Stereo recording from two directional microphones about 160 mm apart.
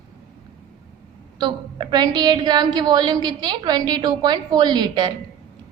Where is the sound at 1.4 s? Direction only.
30° right (ahead or behind).